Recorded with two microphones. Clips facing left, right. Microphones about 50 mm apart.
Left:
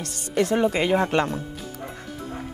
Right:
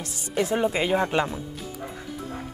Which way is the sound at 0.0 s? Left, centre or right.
Left.